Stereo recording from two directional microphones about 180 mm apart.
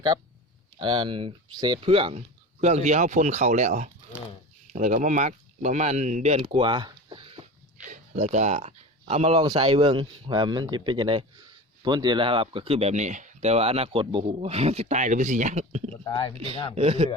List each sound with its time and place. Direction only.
0.8 s speech: 25° right (ahead or behind)
7.9 s a sound: 40° right (ahead or behind)
9.5 s speech: 30° right (ahead or behind)
16.0 s speech: 20° left (ahead or behind)
16.7 s speech: 35° right (ahead or behind)